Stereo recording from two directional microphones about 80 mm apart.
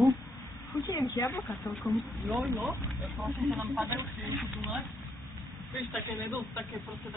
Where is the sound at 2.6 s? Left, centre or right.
Right.